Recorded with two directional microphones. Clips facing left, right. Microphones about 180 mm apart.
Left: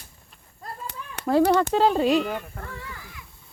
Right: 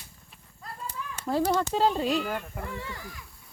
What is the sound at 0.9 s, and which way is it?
A child's voice, 70° left (ahead or behind).